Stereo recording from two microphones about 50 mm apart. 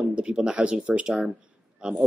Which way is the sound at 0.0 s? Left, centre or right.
Right.